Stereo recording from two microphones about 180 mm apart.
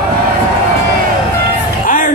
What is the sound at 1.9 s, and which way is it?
Music, 50° left (ahead or behind).